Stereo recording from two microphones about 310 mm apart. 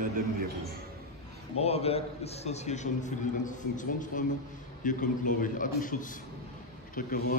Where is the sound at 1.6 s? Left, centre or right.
Centre.